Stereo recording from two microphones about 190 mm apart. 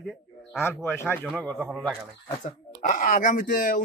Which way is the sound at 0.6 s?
10° left (ahead or behind).